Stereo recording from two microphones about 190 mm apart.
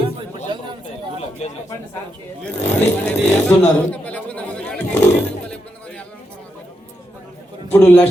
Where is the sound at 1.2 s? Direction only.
35° left (ahead or behind).